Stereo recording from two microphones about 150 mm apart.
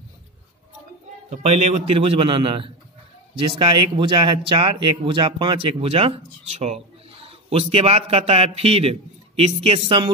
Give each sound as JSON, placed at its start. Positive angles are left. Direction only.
{"t": 1.3, "sound": "speech", "side_deg": -45}